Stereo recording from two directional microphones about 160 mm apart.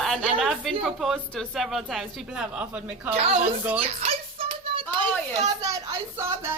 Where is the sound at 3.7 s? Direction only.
35° right (ahead or behind).